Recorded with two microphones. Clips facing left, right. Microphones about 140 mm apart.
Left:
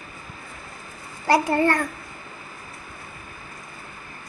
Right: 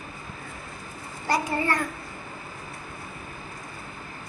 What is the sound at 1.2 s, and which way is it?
Speech, 65° left (ahead or behind).